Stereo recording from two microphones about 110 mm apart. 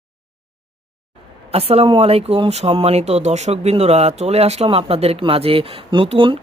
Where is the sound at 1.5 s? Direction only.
65° right (ahead or behind).